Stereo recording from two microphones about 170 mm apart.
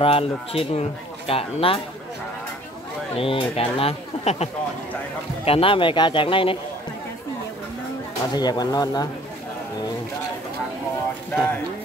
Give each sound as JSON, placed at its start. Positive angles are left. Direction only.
{"t": 0.0, "sound": "speech", "side_deg": 35}
{"t": 3.2, "sound": "speech", "side_deg": 35}
{"t": 8.3, "sound": "speech", "side_deg": 25}